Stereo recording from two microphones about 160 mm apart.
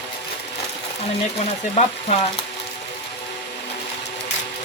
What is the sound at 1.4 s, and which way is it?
Speech, 40° left (ahead or behind).